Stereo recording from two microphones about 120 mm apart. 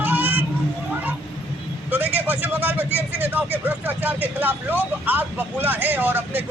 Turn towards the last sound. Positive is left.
turn(degrees=-15)  # may be behind; listen again after turning